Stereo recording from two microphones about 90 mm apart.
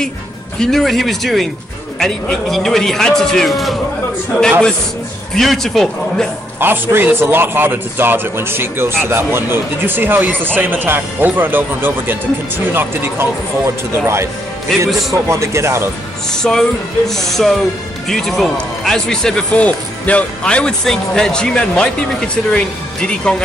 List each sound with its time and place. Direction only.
0.6 s a man's voice: 5° left (ahead or behind)
6.6 s a man's voice: 25° right (ahead or behind)
16.5 s a man's voice: 5° left (ahead or behind)